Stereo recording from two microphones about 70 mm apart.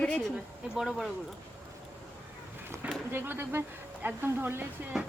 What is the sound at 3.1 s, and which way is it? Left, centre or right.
Speech, right.